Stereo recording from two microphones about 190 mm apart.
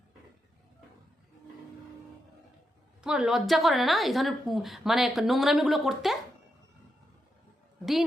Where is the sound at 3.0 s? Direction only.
5° right (ahead or behind).